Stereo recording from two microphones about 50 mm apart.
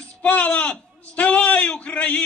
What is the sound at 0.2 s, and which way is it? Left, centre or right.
A man's voice, left.